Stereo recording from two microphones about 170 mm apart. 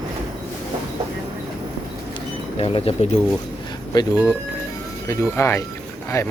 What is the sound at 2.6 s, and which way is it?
Speech, 35° left (ahead or behind).